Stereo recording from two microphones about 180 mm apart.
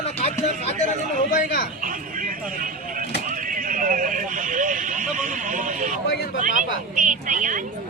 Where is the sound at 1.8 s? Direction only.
50° right (ahead or behind).